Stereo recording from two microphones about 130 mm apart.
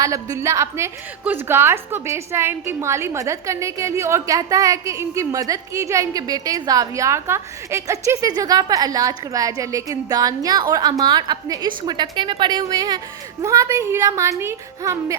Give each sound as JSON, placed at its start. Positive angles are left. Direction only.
{"t": 0.0, "sound": "a woman's voice", "side_deg": -25}